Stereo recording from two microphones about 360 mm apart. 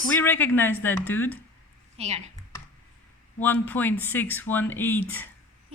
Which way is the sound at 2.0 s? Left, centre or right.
Centre.